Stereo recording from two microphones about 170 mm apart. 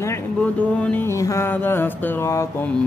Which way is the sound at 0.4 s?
5° left (ahead or behind).